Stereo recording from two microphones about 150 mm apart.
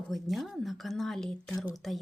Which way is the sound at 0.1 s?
Centre (ahead or behind).